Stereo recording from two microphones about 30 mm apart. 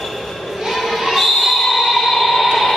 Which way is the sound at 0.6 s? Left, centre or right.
Centre.